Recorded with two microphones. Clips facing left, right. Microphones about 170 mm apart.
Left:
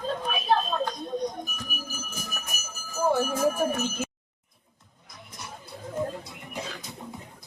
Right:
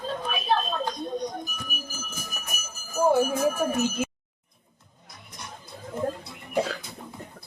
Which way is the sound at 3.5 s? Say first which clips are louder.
Right 2 dB; 10° right (ahead or behind).